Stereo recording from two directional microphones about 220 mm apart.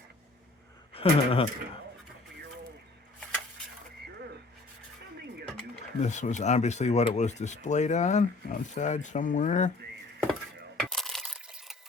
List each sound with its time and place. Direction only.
0.9 s speech: 25° left (ahead or behind)
6.0 s speech: 30° left (ahead or behind)
10.8 s coin: centre (ahead or behind)